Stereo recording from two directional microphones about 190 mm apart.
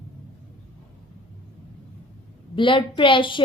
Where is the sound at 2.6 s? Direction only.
25° left (ahead or behind).